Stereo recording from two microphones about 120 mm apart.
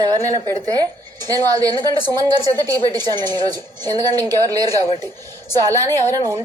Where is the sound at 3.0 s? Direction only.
35° right (ahead or behind).